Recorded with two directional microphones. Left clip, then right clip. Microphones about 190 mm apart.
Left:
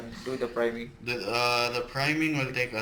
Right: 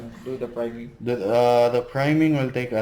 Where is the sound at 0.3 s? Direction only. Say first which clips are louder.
Even; centre (ahead or behind).